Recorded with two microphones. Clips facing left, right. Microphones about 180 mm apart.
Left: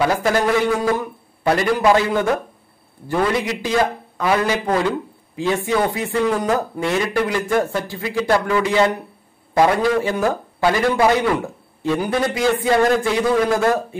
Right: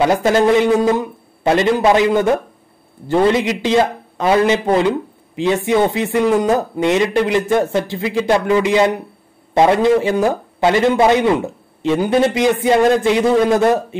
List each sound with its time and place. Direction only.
0.0 s speech: 25° right (ahead or behind)